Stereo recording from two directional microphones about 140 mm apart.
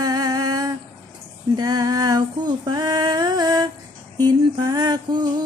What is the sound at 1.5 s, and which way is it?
Female singing, 30° right (ahead or behind).